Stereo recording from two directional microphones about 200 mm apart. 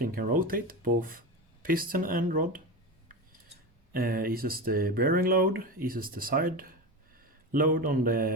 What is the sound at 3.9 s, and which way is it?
Speech, 45° right (ahead or behind).